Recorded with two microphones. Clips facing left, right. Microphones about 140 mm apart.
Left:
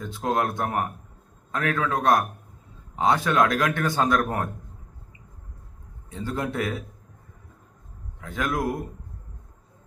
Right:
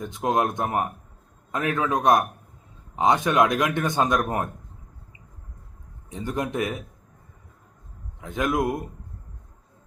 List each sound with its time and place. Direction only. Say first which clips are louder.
0.0 s a man's voice: right 2 dB; 20° right (ahead or behind)
6.1 s a man's voice: right 1 dB; 15° right (ahead or behind)
8.2 s a man's voice: right 3 dB; 20° right (ahead or behind)